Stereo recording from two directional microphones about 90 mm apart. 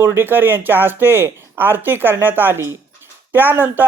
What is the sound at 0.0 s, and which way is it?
Speech, 25° right (ahead or behind).